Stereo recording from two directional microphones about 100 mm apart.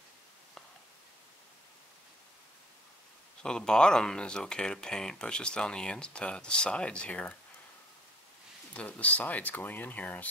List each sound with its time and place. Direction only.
3.4 s speech: 5° left (ahead or behind)
8.7 s speech: 15° left (ahead or behind)